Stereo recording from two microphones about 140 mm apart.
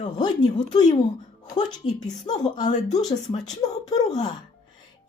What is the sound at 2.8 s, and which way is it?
Speech, 55° left (ahead or behind).